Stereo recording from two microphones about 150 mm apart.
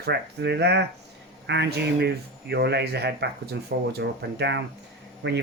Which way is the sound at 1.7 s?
90° right.